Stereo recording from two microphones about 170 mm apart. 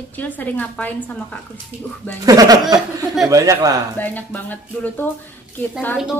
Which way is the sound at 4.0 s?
10° left (ahead or behind).